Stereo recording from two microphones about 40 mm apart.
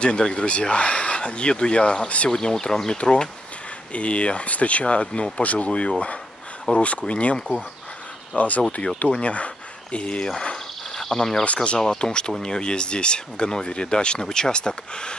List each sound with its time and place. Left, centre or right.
0.0 s speech: left
5.4 s speech: left
5.7 s speech: left
8.4 s speech: left; by 11.4 s centre
11.4 s speech: left